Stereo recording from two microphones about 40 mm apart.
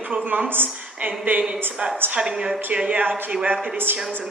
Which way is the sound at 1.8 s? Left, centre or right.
Right.